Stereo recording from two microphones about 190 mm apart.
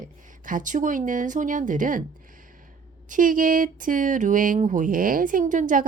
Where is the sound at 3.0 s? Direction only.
45° right (ahead or behind).